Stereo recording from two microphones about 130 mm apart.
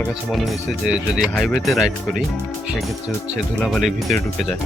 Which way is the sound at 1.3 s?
10° left (ahead or behind).